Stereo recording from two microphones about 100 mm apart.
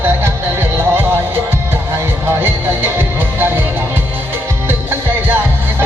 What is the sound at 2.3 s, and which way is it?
Music, 25° right (ahead or behind).